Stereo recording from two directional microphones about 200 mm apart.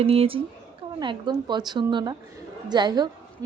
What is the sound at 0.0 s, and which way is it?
A woman's voice, 30° right (ahead or behind).